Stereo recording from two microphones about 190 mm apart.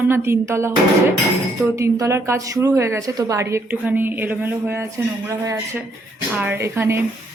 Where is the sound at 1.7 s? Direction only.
15° right (ahead or behind).